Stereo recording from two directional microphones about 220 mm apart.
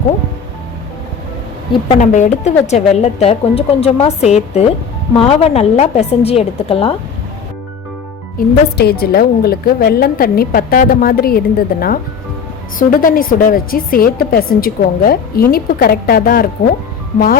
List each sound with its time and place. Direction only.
1.9 s a woman's voice: 35° left (ahead or behind)
8.8 s a woman's voice: 45° left (ahead or behind)